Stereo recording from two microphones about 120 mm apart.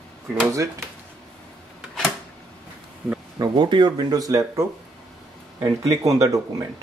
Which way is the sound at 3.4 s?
40° right (ahead or behind).